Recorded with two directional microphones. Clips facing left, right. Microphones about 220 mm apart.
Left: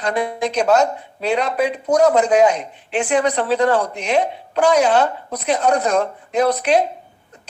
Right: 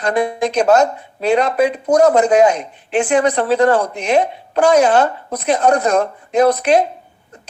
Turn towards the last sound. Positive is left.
turn(degrees=-50)  # may be behind; listen again after turning